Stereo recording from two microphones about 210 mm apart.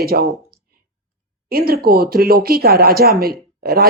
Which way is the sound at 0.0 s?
45° right (ahead or behind).